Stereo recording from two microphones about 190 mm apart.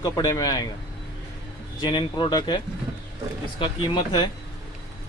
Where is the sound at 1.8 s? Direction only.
25° left (ahead or behind).